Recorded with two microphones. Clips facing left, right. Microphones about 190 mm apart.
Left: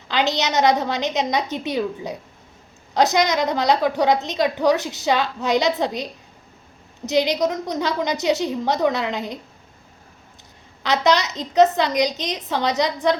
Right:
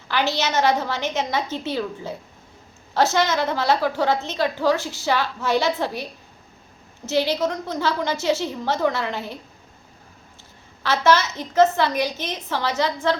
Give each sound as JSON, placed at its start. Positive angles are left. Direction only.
{"t": 0.1, "sound": "a woman's voice", "side_deg": 20}
{"t": 10.8, "sound": "a woman's voice", "side_deg": 15}